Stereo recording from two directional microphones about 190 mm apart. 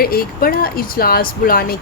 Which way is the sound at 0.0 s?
50° left (ahead or behind).